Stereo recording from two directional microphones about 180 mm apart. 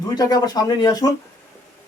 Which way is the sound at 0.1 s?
20° left (ahead or behind).